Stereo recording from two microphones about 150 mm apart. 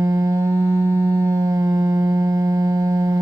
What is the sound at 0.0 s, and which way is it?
Music, 20° right (ahead or behind).